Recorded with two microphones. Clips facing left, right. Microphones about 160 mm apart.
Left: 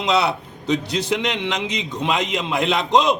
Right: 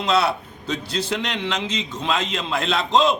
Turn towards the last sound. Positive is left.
turn(degrees=15)  # may be behind; listen again after turning